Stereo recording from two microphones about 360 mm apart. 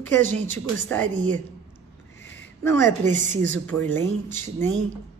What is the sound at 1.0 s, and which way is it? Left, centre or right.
Speech, right.